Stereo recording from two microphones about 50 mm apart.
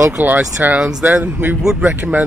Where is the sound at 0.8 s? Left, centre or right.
Centre.